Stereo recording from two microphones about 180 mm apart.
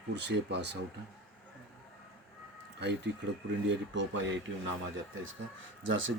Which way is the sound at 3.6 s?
80° right.